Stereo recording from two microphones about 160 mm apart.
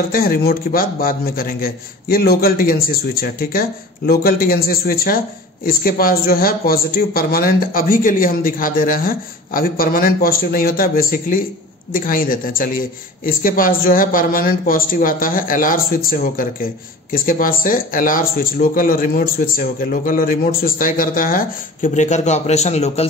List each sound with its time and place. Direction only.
0.1 s a man's voice: 65° left (ahead or behind); by 23.0 s 40° left (ahead or behind)